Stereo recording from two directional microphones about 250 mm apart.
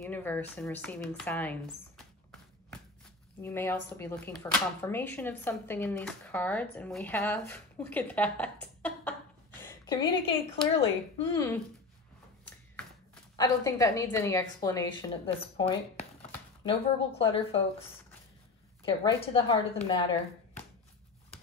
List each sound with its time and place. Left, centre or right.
0.0 s speech: centre
3.3 s a woman's voice: centre
12.4 s a sound: centre
13.4 s a woman's voice: centre
18.9 s a woman's voice: left